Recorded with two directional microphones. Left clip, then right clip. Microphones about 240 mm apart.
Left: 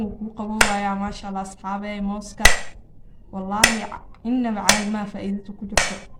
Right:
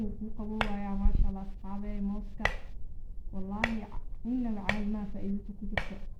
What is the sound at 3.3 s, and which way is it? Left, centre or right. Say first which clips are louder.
Speech: left 15 dB; left.